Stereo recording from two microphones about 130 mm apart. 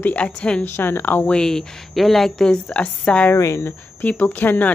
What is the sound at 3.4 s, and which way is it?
Speech, 20° left (ahead or behind).